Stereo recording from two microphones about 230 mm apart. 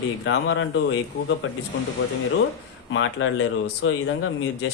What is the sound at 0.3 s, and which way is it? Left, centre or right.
Speech, left.